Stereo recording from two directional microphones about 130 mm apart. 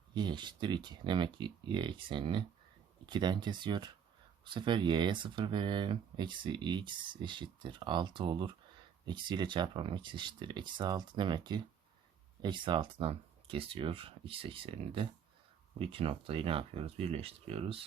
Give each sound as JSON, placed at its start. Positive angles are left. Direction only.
{"t": 0.1, "sound": "speech", "side_deg": -35}